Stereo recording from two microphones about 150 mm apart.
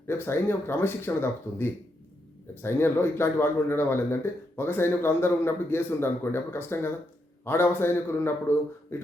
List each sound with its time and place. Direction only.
0.1 s speech: 15° left (ahead or behind)